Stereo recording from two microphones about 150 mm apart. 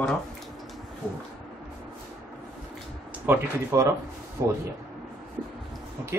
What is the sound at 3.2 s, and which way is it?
Speech, 20° right (ahead or behind).